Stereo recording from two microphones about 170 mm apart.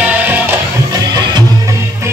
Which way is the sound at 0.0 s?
10° right (ahead or behind).